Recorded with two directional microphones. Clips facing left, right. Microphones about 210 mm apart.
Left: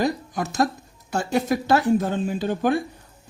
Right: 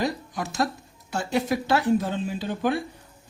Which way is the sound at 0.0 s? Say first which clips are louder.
Left 4 dB; 45° left (ahead or behind).